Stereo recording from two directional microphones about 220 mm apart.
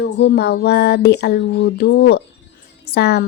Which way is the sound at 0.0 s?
50° left (ahead or behind).